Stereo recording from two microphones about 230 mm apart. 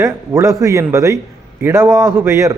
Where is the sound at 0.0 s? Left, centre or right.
Centre.